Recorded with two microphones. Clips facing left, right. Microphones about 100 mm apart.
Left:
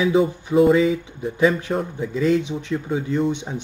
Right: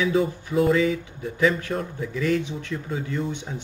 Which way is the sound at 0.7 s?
20° left (ahead or behind).